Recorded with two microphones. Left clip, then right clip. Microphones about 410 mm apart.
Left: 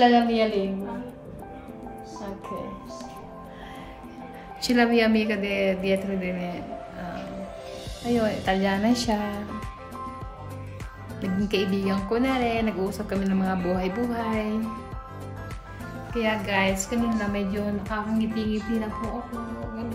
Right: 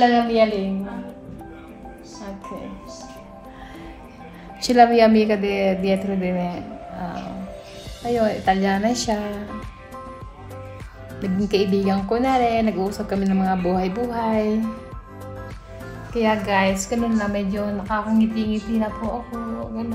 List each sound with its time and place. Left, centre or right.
0.0 s a woman's voice: centre
4.6 s a woman's voice: centre
8.1 s a woman's voice: centre
11.1 s a woman's voice: centre
16.2 s a woman's voice: centre